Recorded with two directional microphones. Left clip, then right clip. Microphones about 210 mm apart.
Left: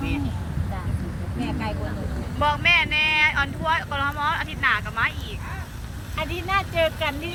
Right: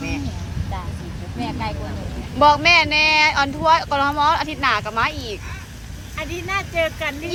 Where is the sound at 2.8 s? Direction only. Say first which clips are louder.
Right 5 dB; 20° right (ahead or behind).